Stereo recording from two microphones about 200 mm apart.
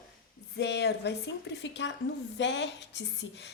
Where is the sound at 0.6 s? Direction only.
55° left (ahead or behind).